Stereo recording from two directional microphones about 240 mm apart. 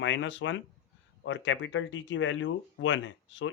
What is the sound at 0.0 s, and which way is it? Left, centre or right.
Speech, left.